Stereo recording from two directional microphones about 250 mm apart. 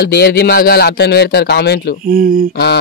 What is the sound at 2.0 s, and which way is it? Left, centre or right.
Speech, right.